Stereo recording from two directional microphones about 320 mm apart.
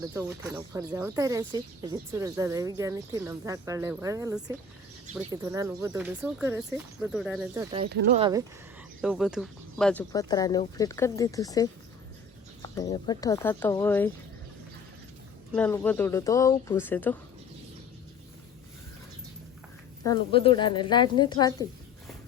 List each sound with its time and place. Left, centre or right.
0.1 s speech: centre
7.8 s speech: right
8.2 s speech: centre
15.5 s speech: centre
20.3 s speech: centre